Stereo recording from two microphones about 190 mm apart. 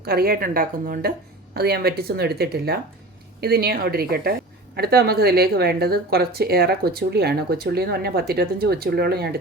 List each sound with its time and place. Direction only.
0.0 s a woman's voice: 55° right (ahead or behind)